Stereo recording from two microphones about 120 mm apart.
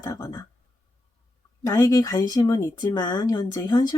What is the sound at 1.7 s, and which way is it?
Speech, 30° left (ahead or behind).